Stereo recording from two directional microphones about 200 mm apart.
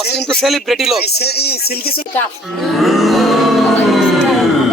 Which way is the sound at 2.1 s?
Centre (ahead or behind).